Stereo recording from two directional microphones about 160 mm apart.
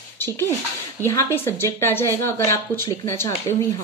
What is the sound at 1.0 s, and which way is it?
A woman's voice, 15° left (ahead or behind).